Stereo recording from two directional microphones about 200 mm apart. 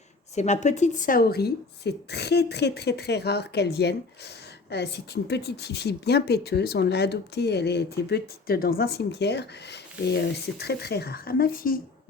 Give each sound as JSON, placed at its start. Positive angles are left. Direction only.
{"t": 0.3, "sound": "speech", "side_deg": 35}